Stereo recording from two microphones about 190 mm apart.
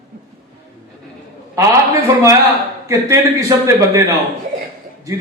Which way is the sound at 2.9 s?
15° right (ahead or behind).